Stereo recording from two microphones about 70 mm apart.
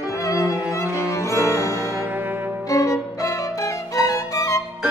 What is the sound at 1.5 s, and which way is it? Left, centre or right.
Music, left.